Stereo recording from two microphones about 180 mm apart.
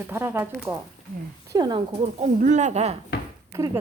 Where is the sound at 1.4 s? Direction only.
25° right (ahead or behind).